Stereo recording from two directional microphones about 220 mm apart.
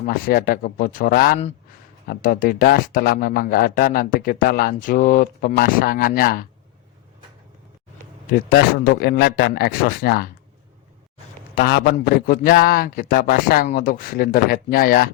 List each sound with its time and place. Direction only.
0.0 s speech: 40° left (ahead or behind)
8.3 s a man's voice: 40° left (ahead or behind)
11.5 s a man's voice: 50° left (ahead or behind)